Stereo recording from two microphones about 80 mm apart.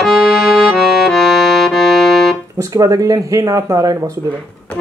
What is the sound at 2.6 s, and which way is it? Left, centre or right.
Speech, right.